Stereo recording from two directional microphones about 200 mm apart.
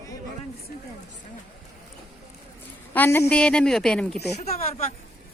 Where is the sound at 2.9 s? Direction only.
10° left (ahead or behind).